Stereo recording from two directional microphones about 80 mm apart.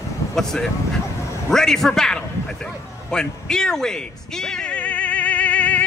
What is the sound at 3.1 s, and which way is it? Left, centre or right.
Music, centre.